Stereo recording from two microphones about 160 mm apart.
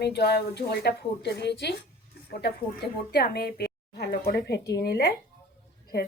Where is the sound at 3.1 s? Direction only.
75° left (ahead or behind).